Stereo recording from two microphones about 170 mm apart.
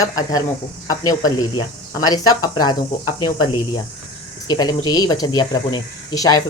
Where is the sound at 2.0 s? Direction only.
25° left (ahead or behind).